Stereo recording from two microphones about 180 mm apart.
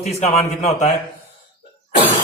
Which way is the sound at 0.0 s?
35° left (ahead or behind).